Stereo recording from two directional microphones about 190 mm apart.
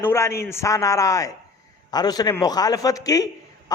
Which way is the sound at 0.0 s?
15° left (ahead or behind).